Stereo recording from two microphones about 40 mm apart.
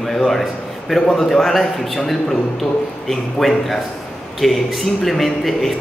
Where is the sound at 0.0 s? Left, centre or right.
Centre.